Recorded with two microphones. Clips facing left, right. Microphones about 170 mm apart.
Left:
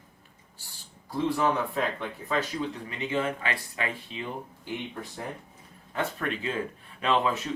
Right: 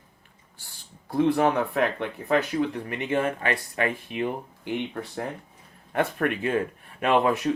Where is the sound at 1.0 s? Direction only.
60° right (ahead or behind).